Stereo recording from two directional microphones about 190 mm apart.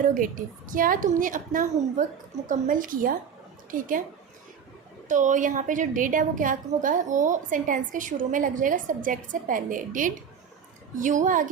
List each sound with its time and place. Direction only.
0.0 s a woman's voice: 45° right (ahead or behind)
5.0 s a woman's voice: 40° right (ahead or behind)